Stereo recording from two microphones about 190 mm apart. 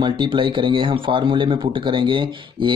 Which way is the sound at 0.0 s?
25° right (ahead or behind).